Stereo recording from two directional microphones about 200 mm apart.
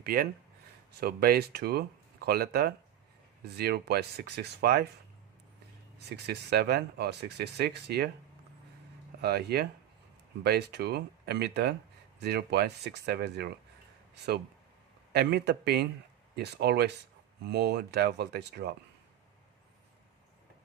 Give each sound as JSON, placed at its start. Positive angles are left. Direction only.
{"t": 0.0, "sound": "speech", "side_deg": -50}
{"t": 6.1, "sound": "speech", "side_deg": -55}
{"t": 9.2, "sound": "speech", "side_deg": -55}
{"t": 15.1, "sound": "speech", "side_deg": -50}